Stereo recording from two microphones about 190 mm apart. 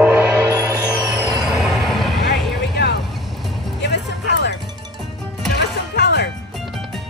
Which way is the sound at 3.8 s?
65° left (ahead or behind).